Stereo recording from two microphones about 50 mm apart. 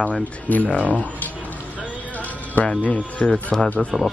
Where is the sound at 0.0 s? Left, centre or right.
Left.